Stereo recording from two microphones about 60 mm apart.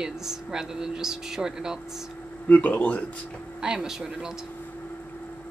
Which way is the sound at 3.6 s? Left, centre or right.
Centre.